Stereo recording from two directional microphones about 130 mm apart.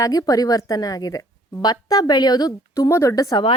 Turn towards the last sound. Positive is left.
turn(degrees=25)  # may be behind; listen again after turning